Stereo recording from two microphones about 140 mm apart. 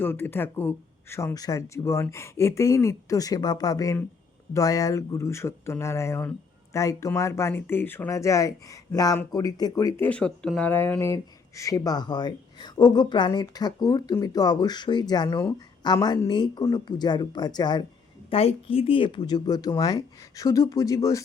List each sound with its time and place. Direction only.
0.0 s speech: 15° left (ahead or behind)
10.0 s speech: 10° left (ahead or behind); by 17.8 s 30° left (ahead or behind)
18.3 s speech: 45° left (ahead or behind); by 21.2 s 25° left (ahead or behind)